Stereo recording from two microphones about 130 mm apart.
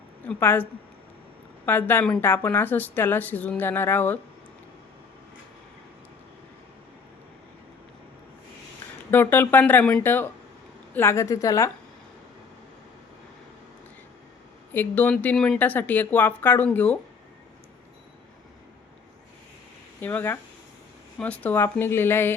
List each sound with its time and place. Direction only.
0.3 s a woman's voice: 15° left (ahead or behind)
1.6 s a woman's voice: 15° left (ahead or behind)
9.0 s a woman's voice: 15° left (ahead or behind)
14.7 s a woman's voice: 15° left (ahead or behind)
20.0 s a woman's voice: 15° left (ahead or behind)